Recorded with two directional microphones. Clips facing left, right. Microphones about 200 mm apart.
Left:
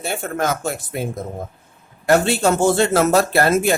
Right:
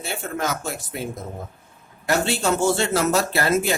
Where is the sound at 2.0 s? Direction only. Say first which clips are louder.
Left 6 dB; 55° left (ahead or behind).